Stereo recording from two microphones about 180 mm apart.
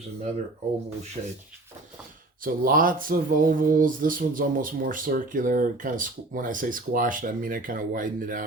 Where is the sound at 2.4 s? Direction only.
50° right (ahead or behind).